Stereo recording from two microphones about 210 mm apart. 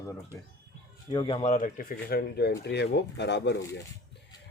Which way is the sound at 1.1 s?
25° left (ahead or behind).